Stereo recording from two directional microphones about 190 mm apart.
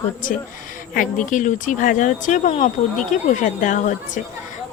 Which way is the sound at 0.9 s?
45° left (ahead or behind).